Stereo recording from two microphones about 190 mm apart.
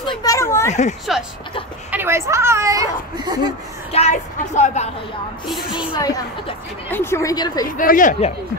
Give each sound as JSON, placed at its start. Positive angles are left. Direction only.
{"t": 0.2, "sound": "children playing", "side_deg": 15}
{"t": 1.1, "sound": "speech", "side_deg": 0}
{"t": 3.9, "sound": "a woman's voice", "side_deg": 35}
{"t": 5.5, "sound": "speech", "side_deg": -5}
{"t": 5.9, "sound": "a woman's voice", "side_deg": 20}
{"t": 7.6, "sound": "speech", "side_deg": 45}